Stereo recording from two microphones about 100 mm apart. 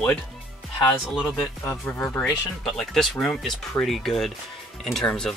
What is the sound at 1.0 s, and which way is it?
Speech, 5° right (ahead or behind).